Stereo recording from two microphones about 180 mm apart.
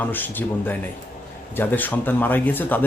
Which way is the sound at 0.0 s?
10° left (ahead or behind).